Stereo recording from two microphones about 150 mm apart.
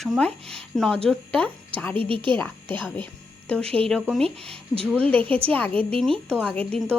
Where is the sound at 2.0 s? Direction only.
35° right (ahead or behind).